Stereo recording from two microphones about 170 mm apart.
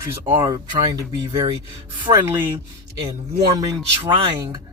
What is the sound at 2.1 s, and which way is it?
Speech, 10° right (ahead or behind).